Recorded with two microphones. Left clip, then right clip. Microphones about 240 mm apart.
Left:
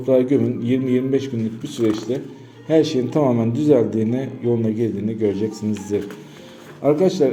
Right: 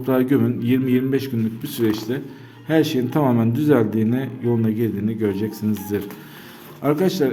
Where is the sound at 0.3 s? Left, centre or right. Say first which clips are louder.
Even; right.